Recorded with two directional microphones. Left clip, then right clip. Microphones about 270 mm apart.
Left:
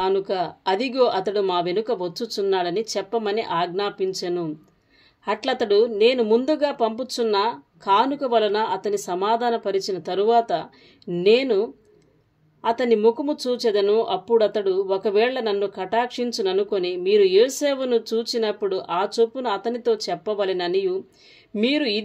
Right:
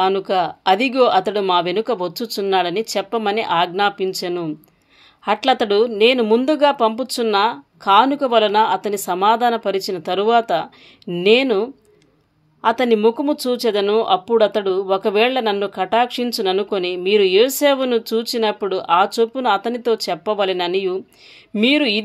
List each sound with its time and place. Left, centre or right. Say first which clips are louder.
0.0 s speech: right 5 dB; centre